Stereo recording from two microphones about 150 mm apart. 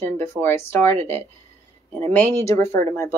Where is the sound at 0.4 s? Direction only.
15° left (ahead or behind).